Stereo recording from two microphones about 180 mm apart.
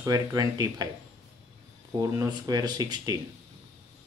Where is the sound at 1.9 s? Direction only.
20° right (ahead or behind).